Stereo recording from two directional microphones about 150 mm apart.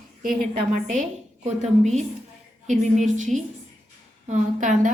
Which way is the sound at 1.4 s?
50° right (ahead or behind).